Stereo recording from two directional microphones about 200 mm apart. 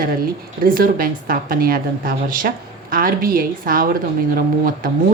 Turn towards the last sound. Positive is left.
turn(degrees=-45)  # may be behind; listen again after turning